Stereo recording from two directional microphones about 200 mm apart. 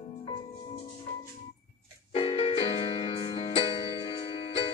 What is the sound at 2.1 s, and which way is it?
Music, 30° left (ahead or behind).